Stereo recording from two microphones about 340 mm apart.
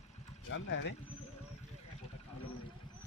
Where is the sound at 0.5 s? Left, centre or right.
Left.